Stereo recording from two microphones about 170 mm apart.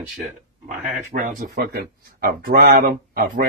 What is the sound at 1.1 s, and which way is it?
A man's voice, 55° right (ahead or behind).